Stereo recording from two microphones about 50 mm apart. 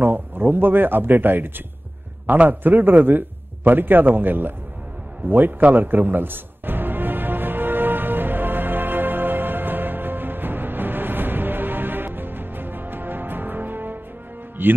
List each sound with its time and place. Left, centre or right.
0.0 s a man's voice: right
5.3 s music: right
14.6 s speech: right